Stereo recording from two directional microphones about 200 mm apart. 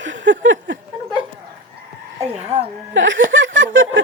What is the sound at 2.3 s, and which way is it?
Speech, 30° right (ahead or behind).